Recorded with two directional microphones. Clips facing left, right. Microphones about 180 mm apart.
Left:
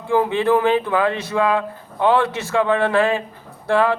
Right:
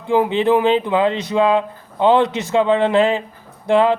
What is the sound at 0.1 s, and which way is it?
Speech, 20° right (ahead or behind).